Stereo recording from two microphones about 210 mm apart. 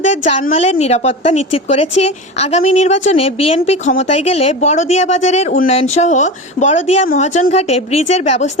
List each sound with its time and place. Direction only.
0.0 s a woman's voice: 35° left (ahead or behind)